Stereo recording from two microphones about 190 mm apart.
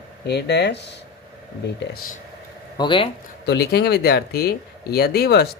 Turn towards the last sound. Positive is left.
turn(degrees=55)  # may be behind; listen again after turning